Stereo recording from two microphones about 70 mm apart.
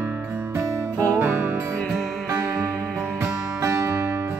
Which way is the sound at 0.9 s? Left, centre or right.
Right.